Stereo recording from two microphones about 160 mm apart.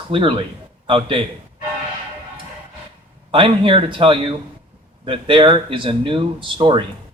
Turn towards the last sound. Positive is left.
turn(degrees=-30)  # may be behind; listen again after turning